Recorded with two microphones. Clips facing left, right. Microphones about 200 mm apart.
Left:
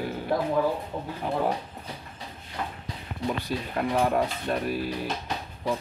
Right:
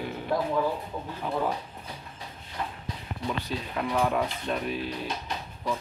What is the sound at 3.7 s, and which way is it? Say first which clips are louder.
Speech: left 2 dB; 45° left (ahead or behind).